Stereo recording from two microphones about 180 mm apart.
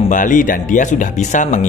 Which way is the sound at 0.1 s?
45° left (ahead or behind).